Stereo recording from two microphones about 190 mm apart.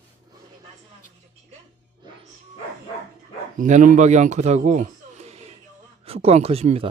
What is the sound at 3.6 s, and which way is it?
Speech, 45° right (ahead or behind).